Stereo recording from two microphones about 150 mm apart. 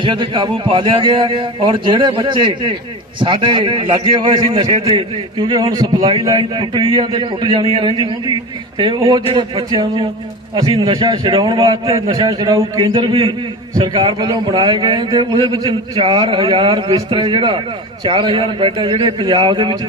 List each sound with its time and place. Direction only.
0.0 s a man's voice: 30° right (ahead or behind)
9.0 s a man's voice: 25° right (ahead or behind)
9.3 s a man's voice: 35° right (ahead or behind)